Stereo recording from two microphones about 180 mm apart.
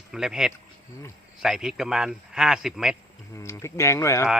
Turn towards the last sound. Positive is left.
turn(degrees=15)  # may be behind; listen again after turning